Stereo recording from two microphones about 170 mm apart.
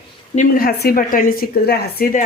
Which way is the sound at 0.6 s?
65° left (ahead or behind).